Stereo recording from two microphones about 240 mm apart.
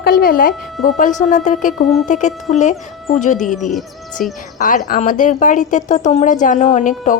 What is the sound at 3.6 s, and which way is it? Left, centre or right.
Speech, centre.